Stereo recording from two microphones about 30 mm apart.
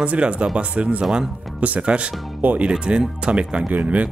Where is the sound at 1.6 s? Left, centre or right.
Right.